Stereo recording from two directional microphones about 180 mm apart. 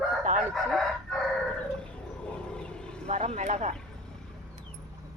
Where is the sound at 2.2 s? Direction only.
5° left (ahead or behind).